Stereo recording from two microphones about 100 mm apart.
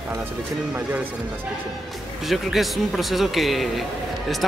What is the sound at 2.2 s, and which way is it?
Speech, centre (ahead or behind).